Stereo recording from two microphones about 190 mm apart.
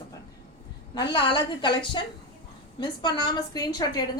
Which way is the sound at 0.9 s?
25° left (ahead or behind).